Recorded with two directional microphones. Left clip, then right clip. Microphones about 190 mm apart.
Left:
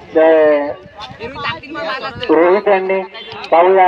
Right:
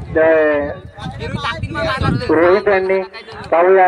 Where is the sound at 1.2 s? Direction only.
45° right (ahead or behind).